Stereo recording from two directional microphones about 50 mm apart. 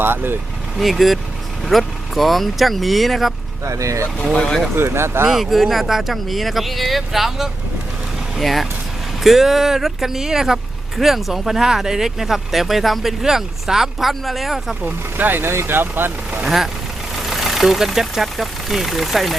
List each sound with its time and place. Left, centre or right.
0.0 s speech: right
0.8 s speech: centre
3.7 s speech: right
4.7 s speech: right
5.3 s speech: centre
14.8 s speech: right
17.2 s speech: centre